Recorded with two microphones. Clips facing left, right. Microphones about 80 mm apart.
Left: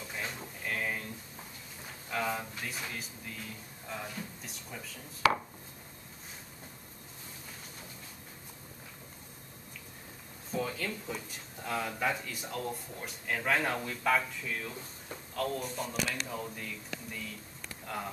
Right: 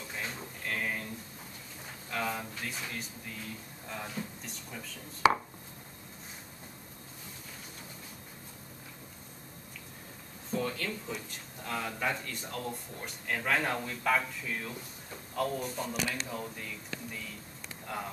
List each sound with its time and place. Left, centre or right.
0.4 s drawer open or close: centre
2.0 s a sound: centre
2.9 s speech: centre
5.2 s chopping: right
10.5 s speech: centre